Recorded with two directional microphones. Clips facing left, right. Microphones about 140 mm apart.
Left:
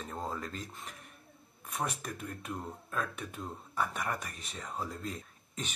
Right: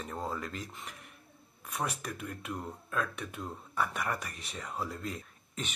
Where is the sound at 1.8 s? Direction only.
45° left (ahead or behind).